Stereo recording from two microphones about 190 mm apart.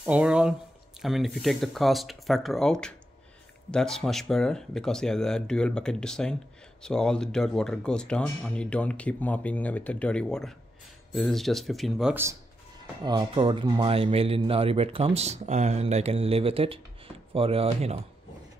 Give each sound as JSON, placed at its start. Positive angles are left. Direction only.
{"t": 0.0, "sound": "speech", "side_deg": -5}
{"t": 13.0, "sound": "speech", "side_deg": -25}